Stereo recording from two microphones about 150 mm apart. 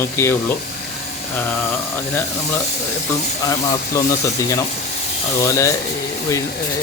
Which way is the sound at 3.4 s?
25° left (ahead or behind).